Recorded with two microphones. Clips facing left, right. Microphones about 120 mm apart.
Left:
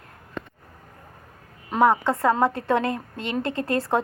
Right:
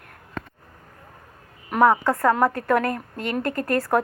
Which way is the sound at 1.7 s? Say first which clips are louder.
Right 1 dB; 20° left (ahead or behind).